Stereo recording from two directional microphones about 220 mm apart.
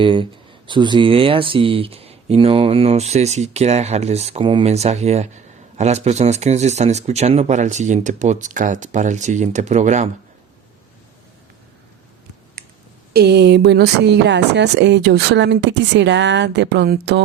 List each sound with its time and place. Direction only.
0.0 s speech: 20° right (ahead or behind)
13.1 s speech: 50° right (ahead or behind)